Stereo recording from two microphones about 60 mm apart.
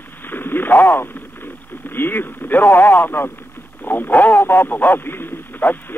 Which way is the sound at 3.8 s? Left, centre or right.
Left.